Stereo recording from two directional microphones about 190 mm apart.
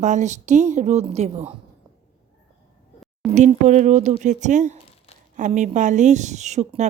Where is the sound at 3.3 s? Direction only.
40° right (ahead or behind).